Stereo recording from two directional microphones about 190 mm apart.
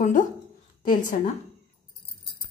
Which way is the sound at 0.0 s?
40° left (ahead or behind).